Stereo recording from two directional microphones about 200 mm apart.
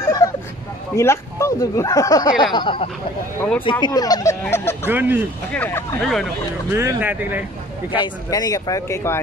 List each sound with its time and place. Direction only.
0.2 s a sound: 15° left (ahead or behind)
0.9 s speech: 15° left (ahead or behind)
3.3 s speech: 10° left (ahead or behind)
4.8 s speech: 10° right (ahead or behind)
5.5 s speech: 10° left (ahead or behind)
6.7 s speech: 15° right (ahead or behind)
8.0 s speech: 20° left (ahead or behind)